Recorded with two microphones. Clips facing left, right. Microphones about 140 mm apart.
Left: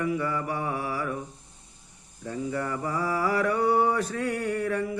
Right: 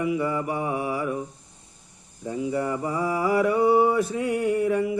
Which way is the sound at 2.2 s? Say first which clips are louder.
Right 4 dB; 15° right (ahead or behind).